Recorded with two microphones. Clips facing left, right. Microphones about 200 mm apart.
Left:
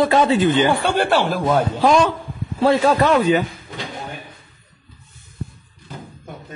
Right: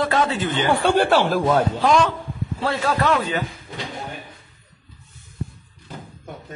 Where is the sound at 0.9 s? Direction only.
Centre (ahead or behind).